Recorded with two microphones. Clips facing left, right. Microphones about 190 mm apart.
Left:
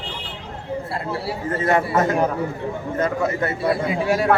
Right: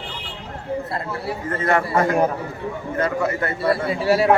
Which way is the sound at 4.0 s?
5° right (ahead or behind).